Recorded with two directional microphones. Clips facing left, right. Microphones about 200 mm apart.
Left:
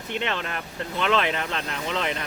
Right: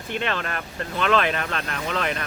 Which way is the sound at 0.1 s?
20° left (ahead or behind).